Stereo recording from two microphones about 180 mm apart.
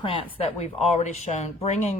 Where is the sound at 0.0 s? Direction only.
30° left (ahead or behind).